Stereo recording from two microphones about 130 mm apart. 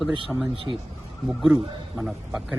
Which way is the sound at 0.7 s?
25° right (ahead or behind).